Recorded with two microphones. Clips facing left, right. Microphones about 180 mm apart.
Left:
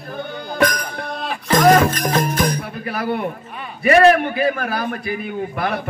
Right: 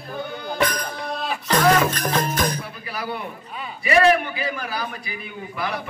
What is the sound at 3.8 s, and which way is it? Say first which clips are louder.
A man's voice: left 5 dB; 55° left (ahead or behind).